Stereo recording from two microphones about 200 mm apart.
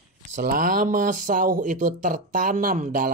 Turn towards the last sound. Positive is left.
turn(degrees=-45)  # may be behind; listen again after turning